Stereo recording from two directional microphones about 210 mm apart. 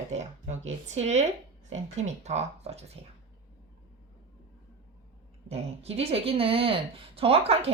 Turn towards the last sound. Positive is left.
turn(degrees=-30)  # may be behind; listen again after turning